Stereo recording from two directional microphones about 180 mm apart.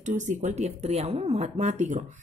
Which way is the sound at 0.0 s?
40° right (ahead or behind).